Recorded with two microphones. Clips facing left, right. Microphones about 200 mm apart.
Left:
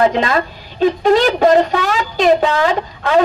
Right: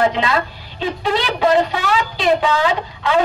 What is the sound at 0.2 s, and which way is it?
A man's voice, 45° left (ahead or behind).